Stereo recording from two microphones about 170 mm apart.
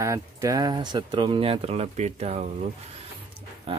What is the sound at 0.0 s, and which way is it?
Speech, 20° right (ahead or behind).